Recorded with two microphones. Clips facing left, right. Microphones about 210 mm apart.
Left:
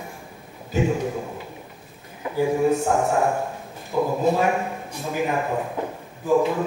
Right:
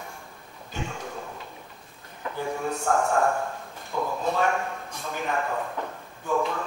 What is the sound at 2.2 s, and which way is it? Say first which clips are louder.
A man's voice: left 9 dB; 10° left (ahead or behind).